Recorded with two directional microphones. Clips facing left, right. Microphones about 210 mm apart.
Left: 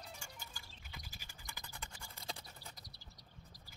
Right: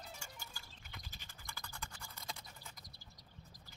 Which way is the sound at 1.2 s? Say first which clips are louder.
Right 1 dB; 15° left (ahead or behind).